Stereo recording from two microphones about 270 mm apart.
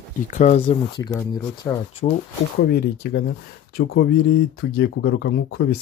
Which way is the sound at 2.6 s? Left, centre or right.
Left.